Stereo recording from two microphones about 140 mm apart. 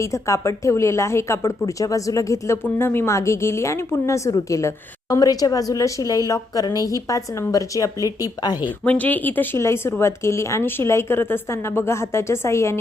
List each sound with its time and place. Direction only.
0.0 s a woman's voice: 20° left (ahead or behind)
8.8 s a woman's voice: 10° left (ahead or behind)